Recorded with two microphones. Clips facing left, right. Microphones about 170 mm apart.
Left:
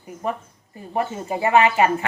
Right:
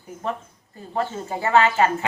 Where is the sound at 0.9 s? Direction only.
15° left (ahead or behind).